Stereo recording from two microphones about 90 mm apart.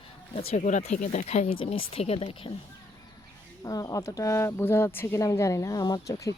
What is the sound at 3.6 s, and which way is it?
Speech, 40° left (ahead or behind).